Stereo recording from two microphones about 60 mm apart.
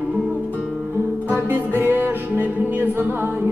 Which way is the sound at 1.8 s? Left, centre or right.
Right.